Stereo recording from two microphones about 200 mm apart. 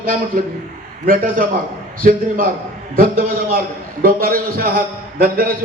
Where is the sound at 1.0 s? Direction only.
45° right (ahead or behind).